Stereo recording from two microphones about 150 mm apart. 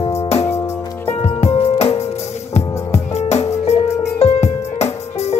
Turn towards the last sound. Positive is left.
turn(degrees=45)  # may be behind; listen again after turning